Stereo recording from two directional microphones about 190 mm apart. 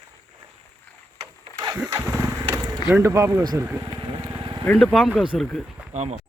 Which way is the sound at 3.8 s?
20° right (ahead or behind).